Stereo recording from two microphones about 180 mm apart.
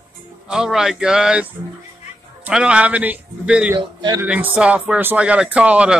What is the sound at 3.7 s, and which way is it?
Speech, 20° right (ahead or behind).